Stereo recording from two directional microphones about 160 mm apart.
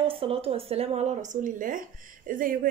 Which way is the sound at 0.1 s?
35° right (ahead or behind).